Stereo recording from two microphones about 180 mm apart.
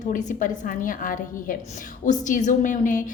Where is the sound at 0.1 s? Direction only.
45° left (ahead or behind).